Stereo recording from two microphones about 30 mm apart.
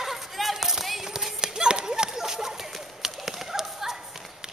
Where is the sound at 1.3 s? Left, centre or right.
Right.